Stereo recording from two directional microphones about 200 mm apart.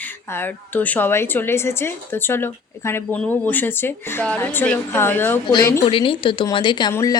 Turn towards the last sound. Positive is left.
turn(degrees=20)  # may be behind; listen again after turning